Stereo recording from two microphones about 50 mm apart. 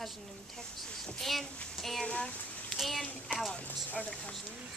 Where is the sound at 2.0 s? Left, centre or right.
Left.